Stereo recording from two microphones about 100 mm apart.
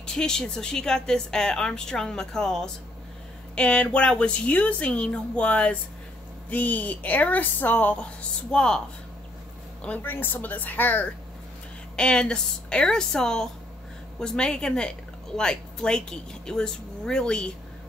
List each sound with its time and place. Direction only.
0.0 s a woman's voice: 5° left (ahead or behind)
9.8 s a woman's voice: 20° left (ahead or behind)